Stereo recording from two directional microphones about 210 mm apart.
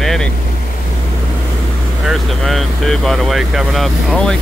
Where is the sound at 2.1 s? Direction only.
Centre (ahead or behind).